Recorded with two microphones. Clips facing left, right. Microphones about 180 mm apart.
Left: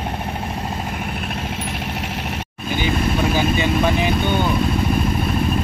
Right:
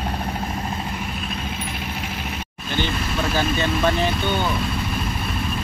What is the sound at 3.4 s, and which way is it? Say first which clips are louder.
Vehicle: left 3 dB; 10° left (ahead or behind).